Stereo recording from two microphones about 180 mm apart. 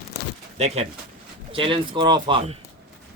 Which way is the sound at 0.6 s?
40° right (ahead or behind).